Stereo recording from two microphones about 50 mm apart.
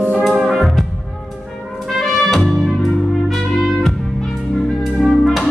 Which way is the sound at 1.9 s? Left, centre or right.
Centre.